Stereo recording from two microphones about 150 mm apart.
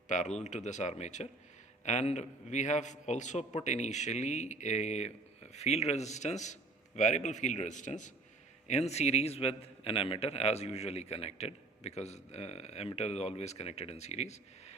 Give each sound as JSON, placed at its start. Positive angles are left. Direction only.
{"t": 0.1, "sound": "speech", "side_deg": 50}